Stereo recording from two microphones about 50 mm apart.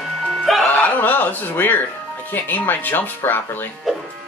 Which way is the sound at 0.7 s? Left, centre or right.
Left.